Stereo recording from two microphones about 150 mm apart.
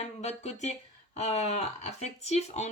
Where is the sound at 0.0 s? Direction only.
50° left (ahead or behind).